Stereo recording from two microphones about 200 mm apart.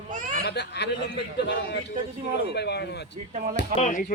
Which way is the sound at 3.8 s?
40° left (ahead or behind).